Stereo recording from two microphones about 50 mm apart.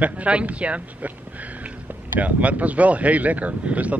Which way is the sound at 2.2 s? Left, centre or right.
Right.